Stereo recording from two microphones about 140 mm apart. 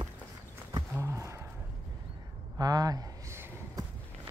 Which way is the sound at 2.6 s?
25° right (ahead or behind).